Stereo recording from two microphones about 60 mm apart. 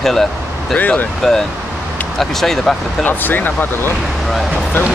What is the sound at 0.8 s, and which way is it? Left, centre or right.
Speech, left.